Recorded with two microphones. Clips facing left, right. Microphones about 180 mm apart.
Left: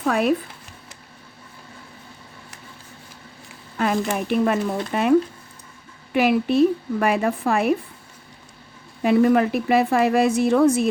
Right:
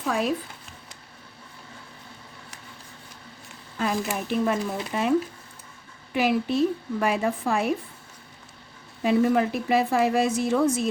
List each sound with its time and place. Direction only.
0.0 s speech: 65° left (ahead or behind)
3.8 s a woman's voice: 65° left (ahead or behind)
6.1 s a woman's voice: 65° left (ahead or behind)
9.0 s a woman's voice: 65° left (ahead or behind)